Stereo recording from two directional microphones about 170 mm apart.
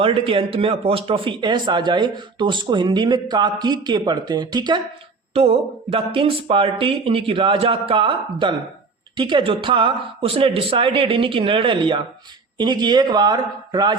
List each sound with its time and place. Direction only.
0.0 s speech: 35° right (ahead or behind)